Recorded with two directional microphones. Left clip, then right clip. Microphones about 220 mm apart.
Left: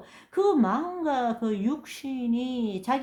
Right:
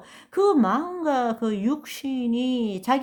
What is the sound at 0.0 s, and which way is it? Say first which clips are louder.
A woman's voice: right 3 dB; 30° right (ahead or behind).